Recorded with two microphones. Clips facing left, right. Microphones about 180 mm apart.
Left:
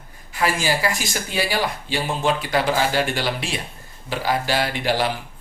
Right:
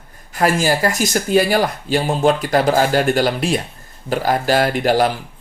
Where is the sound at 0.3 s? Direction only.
45° right (ahead or behind).